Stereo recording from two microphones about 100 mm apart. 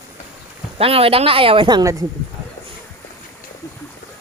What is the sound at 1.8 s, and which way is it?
Speech, 35° right (ahead or behind).